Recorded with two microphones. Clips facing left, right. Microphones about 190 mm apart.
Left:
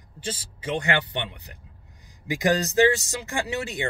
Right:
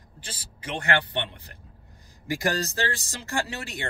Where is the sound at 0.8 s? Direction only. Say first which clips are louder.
Even; 15° left (ahead or behind).